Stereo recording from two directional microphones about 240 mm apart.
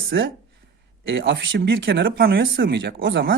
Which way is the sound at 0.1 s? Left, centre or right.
Right.